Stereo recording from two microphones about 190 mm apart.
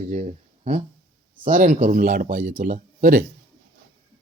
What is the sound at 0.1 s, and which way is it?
Speech, 40° right (ahead or behind).